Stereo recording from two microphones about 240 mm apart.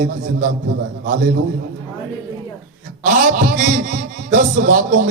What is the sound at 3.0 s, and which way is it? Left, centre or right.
Music, right.